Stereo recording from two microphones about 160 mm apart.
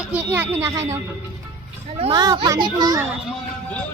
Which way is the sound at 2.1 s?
25° right (ahead or behind).